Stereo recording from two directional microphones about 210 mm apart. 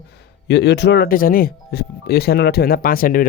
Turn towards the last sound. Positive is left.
turn(degrees=40)  # may be behind; listen again after turning